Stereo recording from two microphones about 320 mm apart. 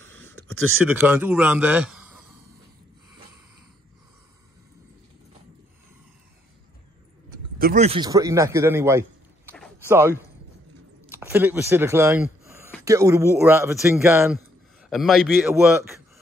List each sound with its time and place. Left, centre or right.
0.0 s a sound: right
0.9 s a man's voice: centre
7.5 s a man's voice: right; by 15.8 s centre